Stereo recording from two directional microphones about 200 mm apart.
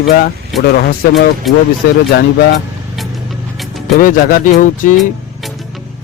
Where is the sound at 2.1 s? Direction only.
55° left (ahead or behind).